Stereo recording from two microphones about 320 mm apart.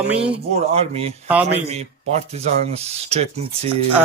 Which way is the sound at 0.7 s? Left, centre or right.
Centre.